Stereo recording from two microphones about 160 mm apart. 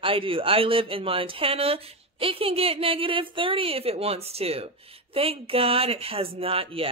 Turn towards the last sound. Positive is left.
turn(degrees=-35)  # may be behind; listen again after turning